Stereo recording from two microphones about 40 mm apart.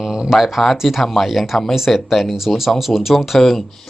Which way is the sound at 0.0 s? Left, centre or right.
Centre.